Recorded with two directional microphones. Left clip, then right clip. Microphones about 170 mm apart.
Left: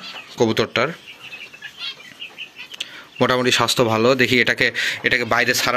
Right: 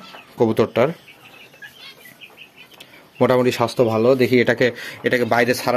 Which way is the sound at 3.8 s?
10° left (ahead or behind).